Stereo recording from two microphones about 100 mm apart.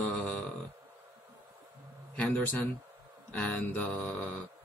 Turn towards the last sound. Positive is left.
turn(degrees=15)  # may be behind; listen again after turning